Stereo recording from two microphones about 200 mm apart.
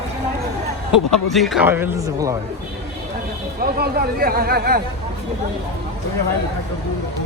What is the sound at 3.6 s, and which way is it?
Speech, 50° right (ahead or behind).